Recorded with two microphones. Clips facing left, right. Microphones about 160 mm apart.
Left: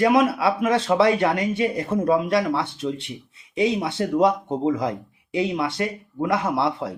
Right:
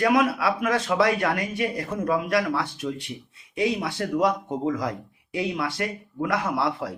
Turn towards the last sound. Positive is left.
turn(degrees=25)  # may be behind; listen again after turning